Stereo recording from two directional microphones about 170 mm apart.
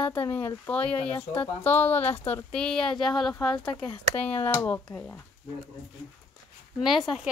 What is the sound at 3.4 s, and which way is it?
Speech, 25° left (ahead or behind).